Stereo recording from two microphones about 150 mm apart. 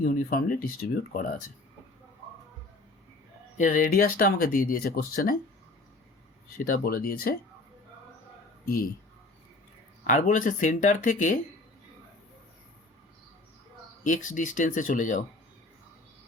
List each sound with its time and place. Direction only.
0.0 s speech: 70° left (ahead or behind)
3.6 s speech: 65° left (ahead or behind)
6.7 s speech: 85° left
10.0 s speech: 60° left (ahead or behind)
14.0 s speech: 60° left (ahead or behind)